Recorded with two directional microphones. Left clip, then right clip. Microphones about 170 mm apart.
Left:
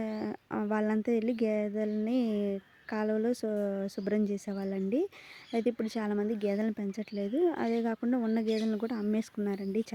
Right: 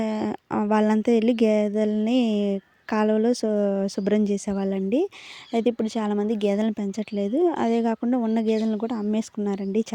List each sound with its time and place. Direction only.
0.0 s speech: 45° right (ahead or behind)